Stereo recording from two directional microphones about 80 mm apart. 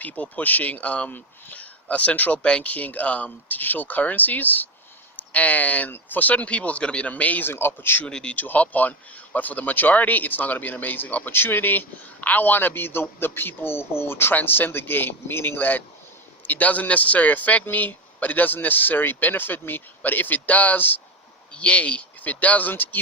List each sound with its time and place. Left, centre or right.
0.0 s speech: centre
8.0 s speech: centre